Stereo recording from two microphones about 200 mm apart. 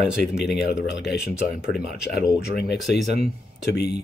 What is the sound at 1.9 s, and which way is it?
Speech, centre (ahead or behind).